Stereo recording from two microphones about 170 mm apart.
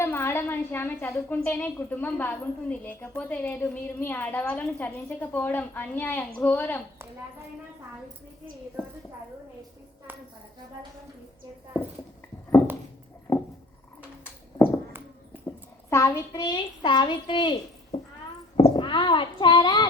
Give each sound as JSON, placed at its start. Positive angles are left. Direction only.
{"t": 0.0, "sound": "a woman's voice", "side_deg": 15}
{"t": 10.1, "sound": "a woman's voice", "side_deg": -10}
{"t": 13.3, "sound": "frog", "side_deg": 10}
{"t": 15.9, "sound": "a child's voice", "side_deg": 15}
{"t": 17.9, "sound": "cat", "side_deg": 40}
{"t": 18.5, "sound": "speech", "side_deg": 30}